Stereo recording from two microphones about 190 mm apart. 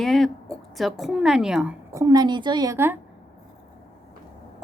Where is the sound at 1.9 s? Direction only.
15° right (ahead or behind).